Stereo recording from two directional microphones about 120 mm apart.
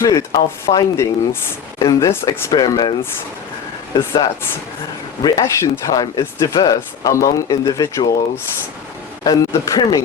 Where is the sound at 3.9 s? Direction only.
40° left (ahead or behind).